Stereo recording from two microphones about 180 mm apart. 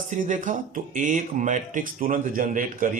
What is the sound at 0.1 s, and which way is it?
Speech, 45° right (ahead or behind).